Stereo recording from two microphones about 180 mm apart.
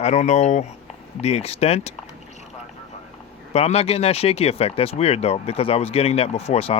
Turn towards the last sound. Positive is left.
turn(degrees=35)  # may be behind; listen again after turning